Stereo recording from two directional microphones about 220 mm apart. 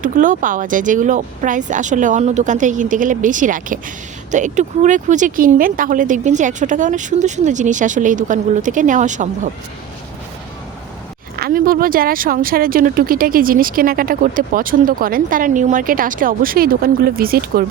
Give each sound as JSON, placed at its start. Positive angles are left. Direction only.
{"t": 0.0, "sound": "speech", "side_deg": -35}
{"t": 11.3, "sound": "speech", "side_deg": -45}